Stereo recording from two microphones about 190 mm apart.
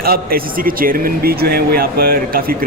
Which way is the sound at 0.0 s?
50° right (ahead or behind).